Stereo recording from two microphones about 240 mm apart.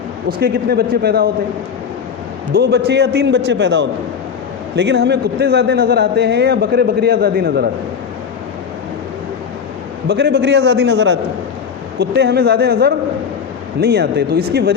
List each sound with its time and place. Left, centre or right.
0.3 s a man's voice: right
2.5 s a man's voice: right
10.1 s a man's voice: right